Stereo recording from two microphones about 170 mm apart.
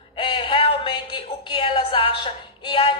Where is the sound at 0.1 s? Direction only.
30° left (ahead or behind).